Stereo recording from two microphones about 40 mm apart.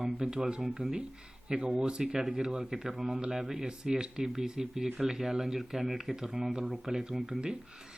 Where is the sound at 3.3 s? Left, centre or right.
Centre.